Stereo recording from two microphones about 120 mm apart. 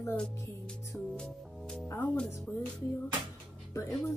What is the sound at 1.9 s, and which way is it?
Speech, 15° left (ahead or behind).